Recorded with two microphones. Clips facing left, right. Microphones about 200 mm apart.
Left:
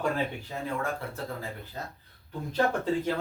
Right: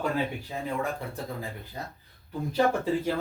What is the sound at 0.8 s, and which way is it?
Speech, 15° right (ahead or behind).